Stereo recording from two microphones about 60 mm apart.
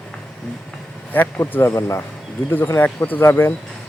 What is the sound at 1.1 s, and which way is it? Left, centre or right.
Speech, left.